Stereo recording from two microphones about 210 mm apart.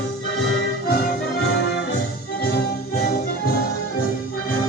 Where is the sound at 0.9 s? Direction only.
50° left (ahead or behind).